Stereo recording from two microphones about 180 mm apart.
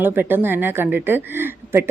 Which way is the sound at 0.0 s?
10° right (ahead or behind).